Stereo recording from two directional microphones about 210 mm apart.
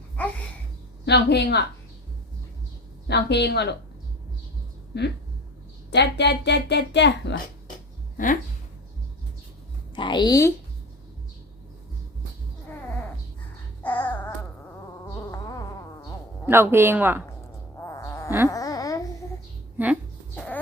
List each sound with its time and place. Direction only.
0.2 s a sound: 5° left (ahead or behind)
1.0 s a woman's voice: 55° left (ahead or behind)
3.1 s a woman's voice: 55° left (ahead or behind)
4.9 s a woman's voice: 50° left (ahead or behind)
8.1 s speech: 40° left (ahead or behind)
9.9 s a woman's voice: 20° left (ahead or behind)
13.8 s babbling: 10° left (ahead or behind)
15.0 s insect: 15° left (ahead or behind)
16.5 s speech: 10° right (ahead or behind)
17.7 s fart: 15° left (ahead or behind)
18.4 s a sound: 15° left (ahead or behind)